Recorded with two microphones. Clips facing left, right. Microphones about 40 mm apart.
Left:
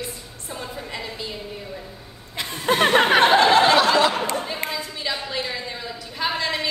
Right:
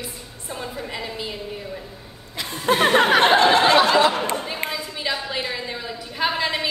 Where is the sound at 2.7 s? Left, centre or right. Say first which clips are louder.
Right 1 dB; centre.